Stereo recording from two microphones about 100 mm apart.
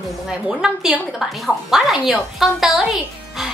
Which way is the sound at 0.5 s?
5° right (ahead or behind).